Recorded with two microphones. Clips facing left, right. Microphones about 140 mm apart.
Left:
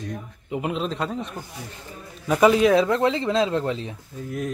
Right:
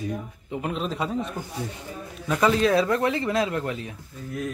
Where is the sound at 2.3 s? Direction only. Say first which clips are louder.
Left 4 dB; 15° left (ahead or behind).